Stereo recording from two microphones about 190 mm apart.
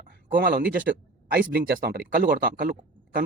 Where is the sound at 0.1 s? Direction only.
50° right (ahead or behind).